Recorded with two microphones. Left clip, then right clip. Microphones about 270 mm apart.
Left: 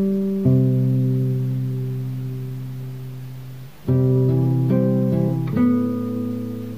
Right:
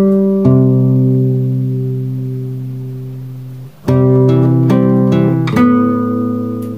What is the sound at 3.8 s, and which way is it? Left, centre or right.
Music, right.